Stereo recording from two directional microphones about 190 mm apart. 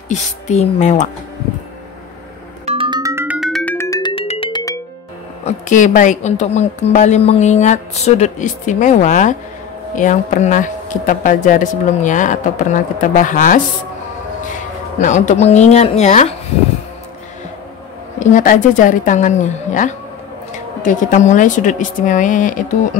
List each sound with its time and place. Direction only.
0.1 s speech: 35° left (ahead or behind)
2.6 s music: 30° right (ahead or behind); by 3.7 s centre (ahead or behind)
3.7 s music: 15° left (ahead or behind)
4.1 s music: 30° left (ahead or behind)
5.4 s speech: 40° left (ahead or behind)
18.2 s speech: 40° left (ahead or behind)